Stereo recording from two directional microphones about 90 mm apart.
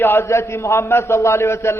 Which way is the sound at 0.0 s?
25° left (ahead or behind).